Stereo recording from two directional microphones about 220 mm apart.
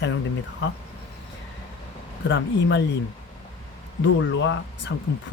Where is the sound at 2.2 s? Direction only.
55° left (ahead or behind).